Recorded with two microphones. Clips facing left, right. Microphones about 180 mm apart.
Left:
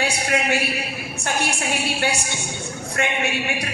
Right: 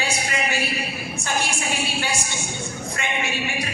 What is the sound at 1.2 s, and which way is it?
A woman's voice, 65° left (ahead or behind).